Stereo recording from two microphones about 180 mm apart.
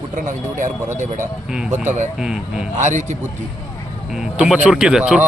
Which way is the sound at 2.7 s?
40° right (ahead or behind).